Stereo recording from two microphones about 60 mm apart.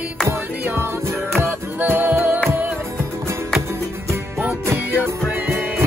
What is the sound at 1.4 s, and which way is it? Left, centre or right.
Music, right.